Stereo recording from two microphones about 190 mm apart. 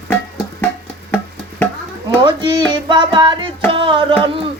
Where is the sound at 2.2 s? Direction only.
25° right (ahead or behind).